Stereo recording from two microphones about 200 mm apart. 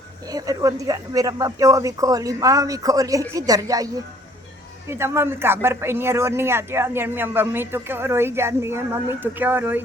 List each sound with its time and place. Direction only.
0.3 s speech: 20° right (ahead or behind)